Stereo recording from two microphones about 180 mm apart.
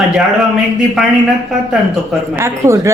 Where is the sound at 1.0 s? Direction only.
Centre (ahead or behind); by 2.9 s 15° right (ahead or behind).